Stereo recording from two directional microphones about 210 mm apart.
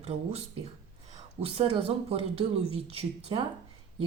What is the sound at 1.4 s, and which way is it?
A woman's voice, 25° right (ahead or behind).